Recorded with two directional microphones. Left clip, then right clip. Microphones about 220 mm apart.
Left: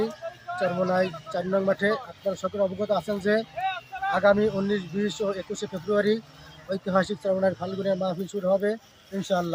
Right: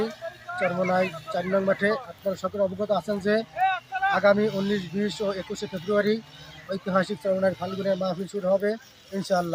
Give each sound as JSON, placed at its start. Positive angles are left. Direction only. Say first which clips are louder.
{"t": 0.6, "sound": "speech", "louder": "even", "side_deg": 5}
{"t": 3.6, "sound": "a sound", "louder": "right 5 dB", "side_deg": -35}
{"t": 4.1, "sound": "speech", "louder": "left 1 dB", "side_deg": 5}